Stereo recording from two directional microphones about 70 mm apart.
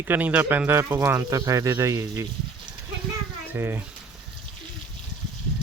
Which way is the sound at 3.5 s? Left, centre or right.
Right.